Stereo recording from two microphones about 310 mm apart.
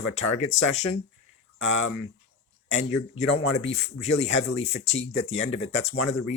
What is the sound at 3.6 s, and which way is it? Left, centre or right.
Speech, centre.